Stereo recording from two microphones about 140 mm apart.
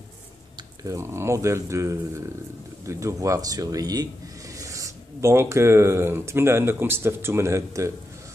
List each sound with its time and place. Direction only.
0.8 s speech: 20° right (ahead or behind)